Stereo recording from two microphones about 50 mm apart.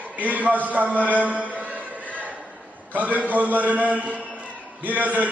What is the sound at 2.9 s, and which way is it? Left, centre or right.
A man's voice, right.